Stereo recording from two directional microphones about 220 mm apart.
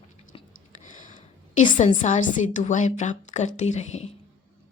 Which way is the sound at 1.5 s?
35° left (ahead or behind).